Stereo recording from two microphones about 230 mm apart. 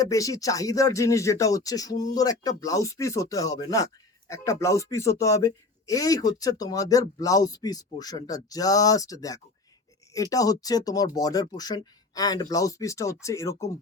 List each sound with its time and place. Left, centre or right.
0.0 s speech: centre